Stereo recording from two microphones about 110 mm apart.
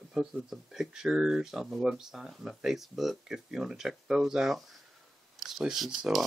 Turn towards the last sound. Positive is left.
turn(degrees=0)  # may be behind; listen again after turning